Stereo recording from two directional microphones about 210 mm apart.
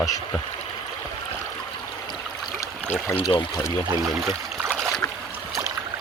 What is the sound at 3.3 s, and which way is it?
Speech, 20° left (ahead or behind).